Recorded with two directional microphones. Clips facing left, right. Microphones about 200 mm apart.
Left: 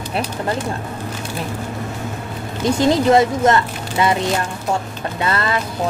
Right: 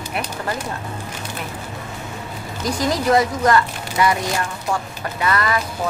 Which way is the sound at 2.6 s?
25° left (ahead or behind).